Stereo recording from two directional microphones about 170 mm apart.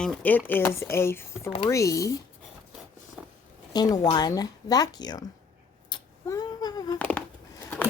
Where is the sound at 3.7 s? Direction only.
25° left (ahead or behind).